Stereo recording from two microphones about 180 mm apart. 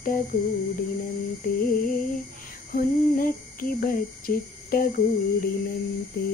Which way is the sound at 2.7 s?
50° left (ahead or behind).